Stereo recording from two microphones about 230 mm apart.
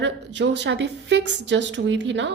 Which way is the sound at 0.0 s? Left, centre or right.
Right.